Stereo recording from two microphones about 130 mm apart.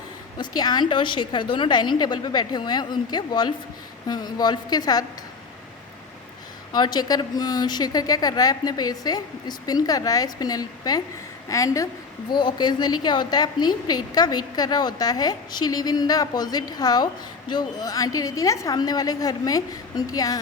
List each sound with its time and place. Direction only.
0.3 s a woman's voice: 30° left (ahead or behind)
6.7 s a woman's voice: 35° left (ahead or behind)
12.3 s a woman's voice: 35° left (ahead or behind)